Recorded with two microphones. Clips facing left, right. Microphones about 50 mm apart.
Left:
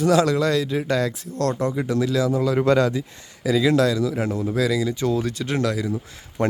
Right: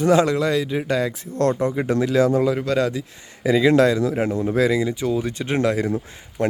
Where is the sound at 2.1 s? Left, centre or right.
Right.